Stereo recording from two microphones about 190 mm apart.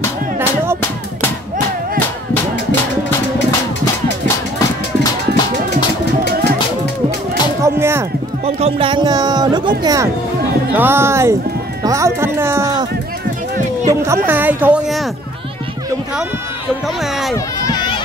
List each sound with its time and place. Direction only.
7.6 s music: 15° right (ahead or behind)
8.5 s speech: 35° right (ahead or behind)
10.7 s speech: 10° right (ahead or behind)
13.8 s speech: 15° right (ahead or behind)